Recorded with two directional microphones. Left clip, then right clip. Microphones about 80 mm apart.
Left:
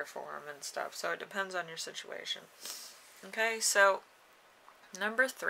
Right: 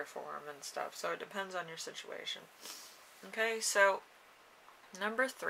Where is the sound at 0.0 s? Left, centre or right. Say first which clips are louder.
Left 2 dB; left.